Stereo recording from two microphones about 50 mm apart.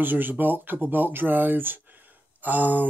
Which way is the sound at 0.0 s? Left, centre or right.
Right.